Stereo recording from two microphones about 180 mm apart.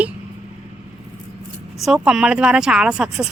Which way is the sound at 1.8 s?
5° right (ahead or behind).